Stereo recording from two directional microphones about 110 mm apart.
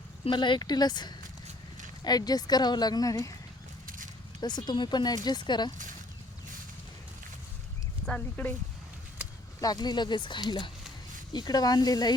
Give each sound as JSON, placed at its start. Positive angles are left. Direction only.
{"t": 0.3, "sound": "speech", "side_deg": 45}
{"t": 4.4, "sound": "speech", "side_deg": 40}
{"t": 8.0, "sound": "speech", "side_deg": 10}
{"t": 9.6, "sound": "speech", "side_deg": 35}